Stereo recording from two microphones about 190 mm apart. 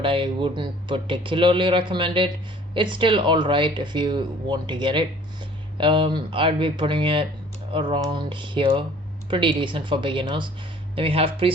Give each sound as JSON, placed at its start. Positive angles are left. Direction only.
{"t": 0.0, "sound": "speech", "side_deg": -25}